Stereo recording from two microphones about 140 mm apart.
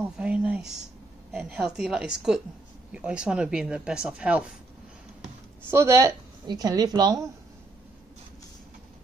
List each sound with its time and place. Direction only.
0.2 s a sound: 5° right (ahead or behind)
1.3 s a woman's voice: 5° right (ahead or behind)
5.7 s speech: 20° right (ahead or behind)